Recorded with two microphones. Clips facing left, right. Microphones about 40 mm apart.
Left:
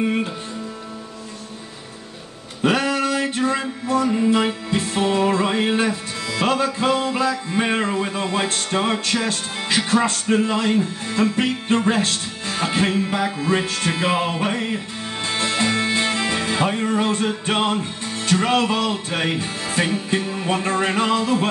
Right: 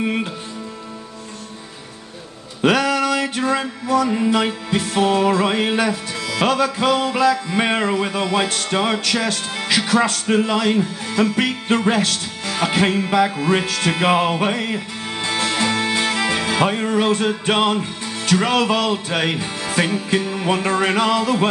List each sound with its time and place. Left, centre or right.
0.0 s speech: right
2.6 s a sound: right
4.6 s music: right
6.4 s speech: right
7.0 s speech: right
10.2 s music: right
11.3 s speech: right
13.2 s music: right